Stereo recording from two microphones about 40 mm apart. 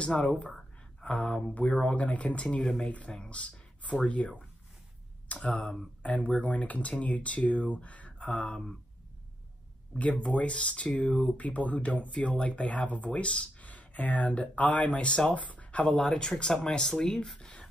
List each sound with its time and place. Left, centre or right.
0.0 s speech: left
1.0 s speech: left
3.1 s speech: left
3.3 s speech: left
9.9 s speech: left
14.9 s speech: left
15.3 s speech: left
16.0 s speech: centre